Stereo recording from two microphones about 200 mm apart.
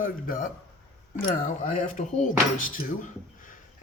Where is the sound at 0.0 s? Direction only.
45° left (ahead or behind).